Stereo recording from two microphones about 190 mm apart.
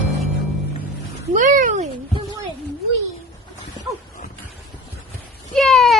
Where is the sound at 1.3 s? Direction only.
45° right (ahead or behind).